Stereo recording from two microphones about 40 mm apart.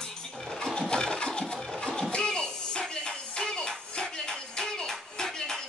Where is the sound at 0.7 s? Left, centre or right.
Centre.